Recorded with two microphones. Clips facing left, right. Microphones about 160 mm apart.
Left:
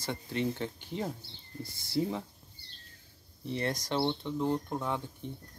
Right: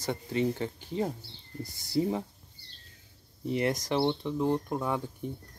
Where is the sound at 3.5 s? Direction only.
15° right (ahead or behind).